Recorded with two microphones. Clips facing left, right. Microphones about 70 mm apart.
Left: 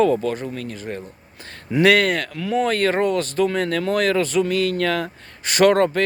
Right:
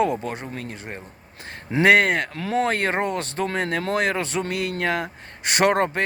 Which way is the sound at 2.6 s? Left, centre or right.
Right.